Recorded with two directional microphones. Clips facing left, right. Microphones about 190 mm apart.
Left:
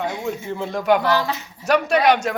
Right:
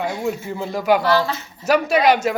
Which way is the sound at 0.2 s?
5° right (ahead or behind).